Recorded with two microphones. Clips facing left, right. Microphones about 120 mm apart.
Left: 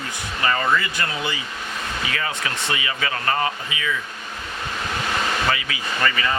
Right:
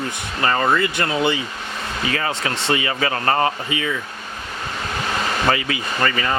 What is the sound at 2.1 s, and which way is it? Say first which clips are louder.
Speech: right 6 dB; 35° right (ahead or behind).